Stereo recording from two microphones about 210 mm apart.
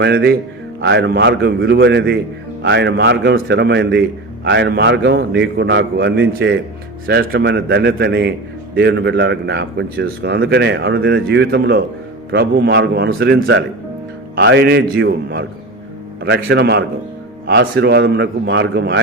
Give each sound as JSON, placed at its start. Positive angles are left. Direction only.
{"t": 0.0, "sound": "a man's voice", "side_deg": -55}